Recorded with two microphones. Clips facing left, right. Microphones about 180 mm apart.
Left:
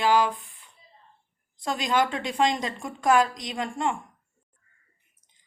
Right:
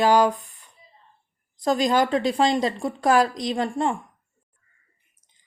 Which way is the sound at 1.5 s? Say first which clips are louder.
Right 5 dB; 40° right (ahead or behind).